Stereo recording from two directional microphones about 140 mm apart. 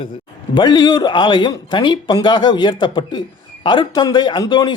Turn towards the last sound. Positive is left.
turn(degrees=30)  # may be behind; listen again after turning